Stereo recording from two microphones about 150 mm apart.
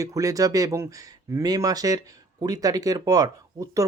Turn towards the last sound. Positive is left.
turn(degrees=-25)  # may be behind; listen again after turning